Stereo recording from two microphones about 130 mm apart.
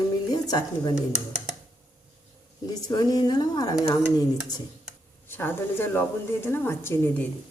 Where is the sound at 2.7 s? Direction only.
30° left (ahead or behind).